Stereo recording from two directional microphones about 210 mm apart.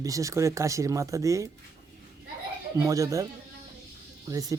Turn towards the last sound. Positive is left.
turn(degrees=-15)  # may be behind; listen again after turning